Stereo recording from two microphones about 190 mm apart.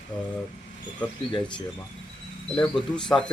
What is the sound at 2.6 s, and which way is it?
Speech, 5° left (ahead or behind).